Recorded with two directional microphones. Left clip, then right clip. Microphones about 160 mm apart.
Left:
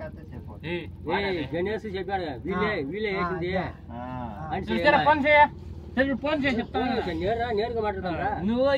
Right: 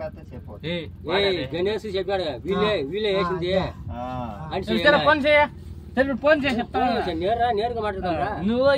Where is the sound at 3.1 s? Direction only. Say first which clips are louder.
Right 4 dB; 50° right (ahead or behind).